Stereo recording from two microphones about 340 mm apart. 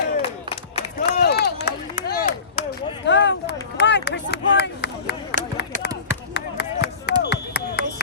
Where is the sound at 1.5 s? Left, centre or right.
Left.